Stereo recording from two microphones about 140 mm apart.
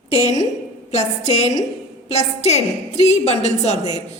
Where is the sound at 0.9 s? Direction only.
50° left (ahead or behind).